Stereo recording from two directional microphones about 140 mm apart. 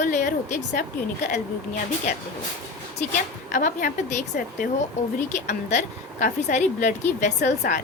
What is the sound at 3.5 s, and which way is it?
Speech, 65° left (ahead or behind).